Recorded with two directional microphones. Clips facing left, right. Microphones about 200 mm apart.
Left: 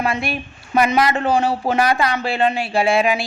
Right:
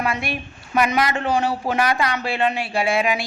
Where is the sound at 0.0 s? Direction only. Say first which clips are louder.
Left 3 dB; 25° left (ahead or behind).